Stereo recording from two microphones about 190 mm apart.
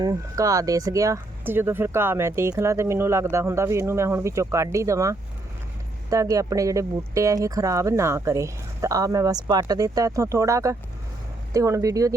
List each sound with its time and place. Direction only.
0.0 s speech: 20° right (ahead or behind)